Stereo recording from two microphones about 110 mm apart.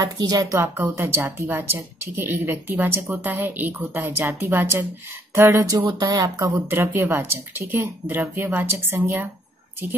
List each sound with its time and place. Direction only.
0.0 s speech: 35° right (ahead or behind)
5.9 s speech: 35° right (ahead or behind)
6.5 s speech: 20° right (ahead or behind)